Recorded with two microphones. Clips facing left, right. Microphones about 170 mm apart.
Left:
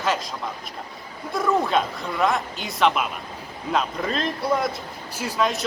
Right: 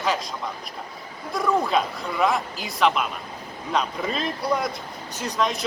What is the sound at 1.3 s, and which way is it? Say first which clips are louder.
Speech: left 1 dB; centre (ahead or behind).